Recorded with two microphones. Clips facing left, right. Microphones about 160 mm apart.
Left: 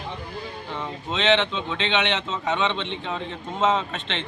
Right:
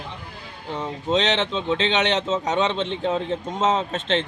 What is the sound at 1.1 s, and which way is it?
Speech, 35° right (ahead or behind).